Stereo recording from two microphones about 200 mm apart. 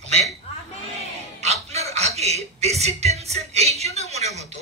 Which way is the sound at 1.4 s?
30° right (ahead or behind).